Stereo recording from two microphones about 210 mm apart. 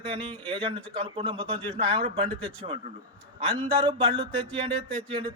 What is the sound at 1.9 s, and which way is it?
Speech, 25° right (ahead or behind).